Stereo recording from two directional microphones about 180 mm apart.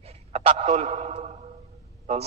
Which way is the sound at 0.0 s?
35° right (ahead or behind).